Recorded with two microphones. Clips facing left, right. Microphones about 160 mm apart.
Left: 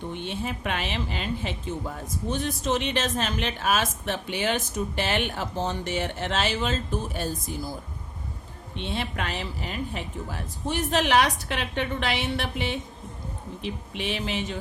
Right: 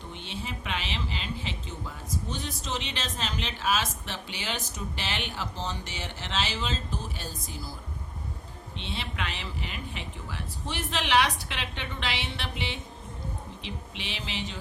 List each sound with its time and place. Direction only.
0.1 s a woman's voice: 55° left (ahead or behind)
8.7 s a woman's voice: 50° left (ahead or behind)